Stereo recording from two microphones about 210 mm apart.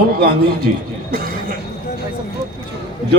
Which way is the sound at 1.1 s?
45° right (ahead or behind).